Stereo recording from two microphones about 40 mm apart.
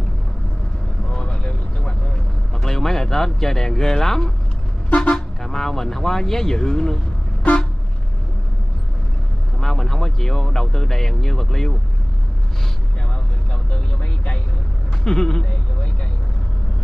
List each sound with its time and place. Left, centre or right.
1.1 s vehicle: left
2.5 s a man's voice: centre
4.8 s vehicle: left
5.4 s speech: centre
9.6 s speech: centre
15.0 s speech: centre